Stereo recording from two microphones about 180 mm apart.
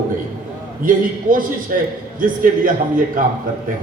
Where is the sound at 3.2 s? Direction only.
50° right (ahead or behind).